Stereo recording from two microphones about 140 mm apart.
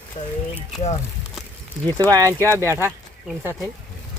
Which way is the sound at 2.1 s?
25° right (ahead or behind).